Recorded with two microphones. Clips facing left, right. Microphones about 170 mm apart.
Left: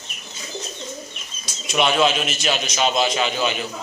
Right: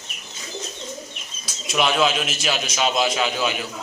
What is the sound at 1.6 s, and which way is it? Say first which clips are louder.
A man's voice: left 2 dB; centre (ahead or behind).